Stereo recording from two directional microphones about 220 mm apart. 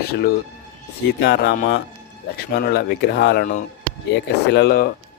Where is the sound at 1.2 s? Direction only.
50° left (ahead or behind).